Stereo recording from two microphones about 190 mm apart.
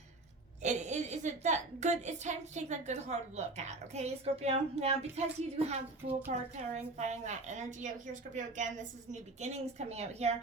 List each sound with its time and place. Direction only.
0.6 s a woman's voice: 40° right (ahead or behind)